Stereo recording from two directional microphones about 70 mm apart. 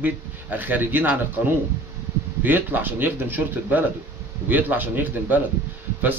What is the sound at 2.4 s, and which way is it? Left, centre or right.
Speech, right.